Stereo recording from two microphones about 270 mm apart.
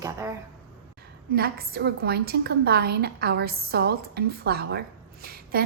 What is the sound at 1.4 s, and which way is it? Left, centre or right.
A woman's voice, right.